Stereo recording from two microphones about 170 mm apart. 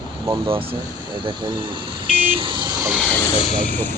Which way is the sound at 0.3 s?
30° right (ahead or behind).